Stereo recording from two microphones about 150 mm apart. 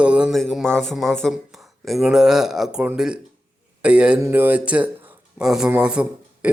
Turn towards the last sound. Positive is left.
turn(degrees=-5)  # may be behind; listen again after turning